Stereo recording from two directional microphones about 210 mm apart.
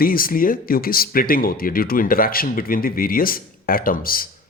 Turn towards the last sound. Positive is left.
turn(degrees=45)  # may be behind; listen again after turning